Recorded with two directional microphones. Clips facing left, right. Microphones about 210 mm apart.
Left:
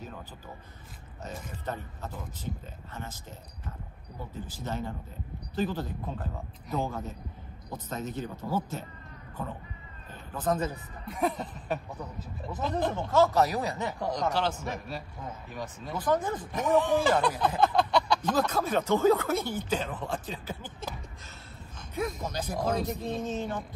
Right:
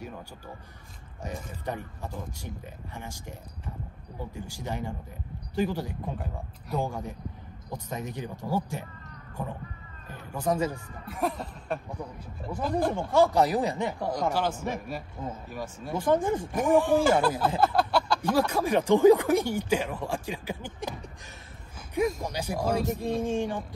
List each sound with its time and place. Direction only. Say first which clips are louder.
1.2 s speech: right 2 dB; 15° right (ahead or behind)
10.0 s speech: right 1 dB; 10° right (ahead or behind)
11.1 s speech: left 1 dB; centre (ahead or behind)
12.5 s speech: right 3 dB; 10° right (ahead or behind)
16.0 s speech: right 4 dB; 25° right (ahead or behind)
16.5 s speech: right 2 dB; 10° right (ahead or behind)